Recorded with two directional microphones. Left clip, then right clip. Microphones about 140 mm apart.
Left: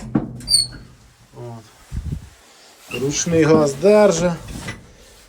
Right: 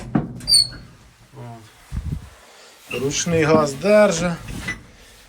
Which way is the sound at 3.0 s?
15° left (ahead or behind).